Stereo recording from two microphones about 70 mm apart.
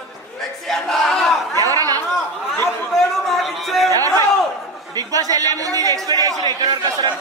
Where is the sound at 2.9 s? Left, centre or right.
Centre.